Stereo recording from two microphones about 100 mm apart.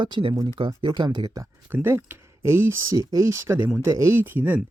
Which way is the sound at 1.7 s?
25° right (ahead or behind).